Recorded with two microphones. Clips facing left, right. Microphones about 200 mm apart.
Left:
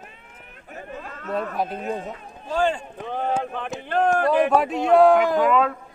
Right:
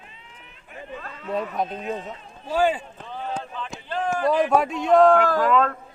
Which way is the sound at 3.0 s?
55° left (ahead or behind).